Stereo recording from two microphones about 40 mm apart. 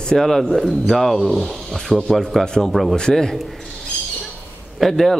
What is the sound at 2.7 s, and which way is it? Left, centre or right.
Speech, centre.